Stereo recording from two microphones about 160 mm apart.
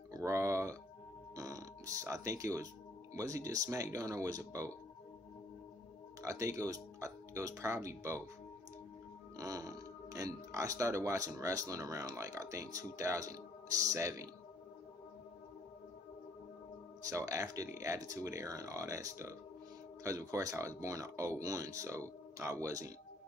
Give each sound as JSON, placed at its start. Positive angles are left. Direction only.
{"t": 0.1, "sound": "a sound", "side_deg": -20}
{"t": 1.3, "sound": "music", "side_deg": -20}
{"t": 3.2, "sound": "speech", "side_deg": -20}
{"t": 6.2, "sound": "speech", "side_deg": -20}
{"t": 9.4, "sound": "speech", "side_deg": -20}
{"t": 17.1, "sound": "speech", "side_deg": -20}